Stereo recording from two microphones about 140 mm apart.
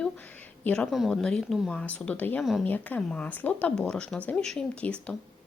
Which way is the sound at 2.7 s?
10° left (ahead or behind).